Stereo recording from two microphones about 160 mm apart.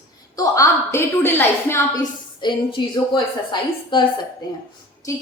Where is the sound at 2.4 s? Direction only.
30° left (ahead or behind).